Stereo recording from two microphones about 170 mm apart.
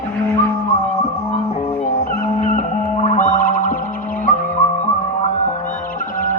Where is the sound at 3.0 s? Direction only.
50° left (ahead or behind).